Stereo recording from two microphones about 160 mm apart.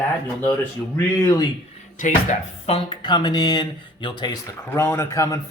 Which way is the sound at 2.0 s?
50° left (ahead or behind).